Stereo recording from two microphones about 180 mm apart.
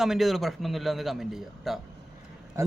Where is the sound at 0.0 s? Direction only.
Centre (ahead or behind).